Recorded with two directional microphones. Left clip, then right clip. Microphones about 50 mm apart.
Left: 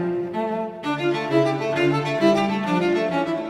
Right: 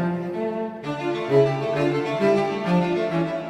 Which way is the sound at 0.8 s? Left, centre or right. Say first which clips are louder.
Left 3 dB; left.